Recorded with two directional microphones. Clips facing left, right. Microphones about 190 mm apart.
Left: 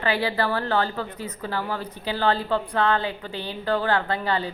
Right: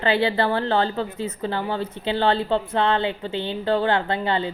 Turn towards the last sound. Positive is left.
turn(degrees=-25)  # may be behind; listen again after turning